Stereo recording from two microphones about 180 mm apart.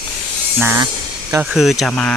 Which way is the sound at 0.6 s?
15° right (ahead or behind).